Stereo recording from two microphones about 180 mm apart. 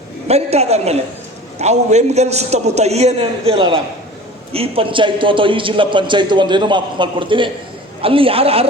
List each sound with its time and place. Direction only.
0.3 s a man's voice: 35° right (ahead or behind)